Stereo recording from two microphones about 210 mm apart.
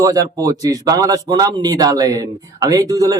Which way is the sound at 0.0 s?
15° right (ahead or behind).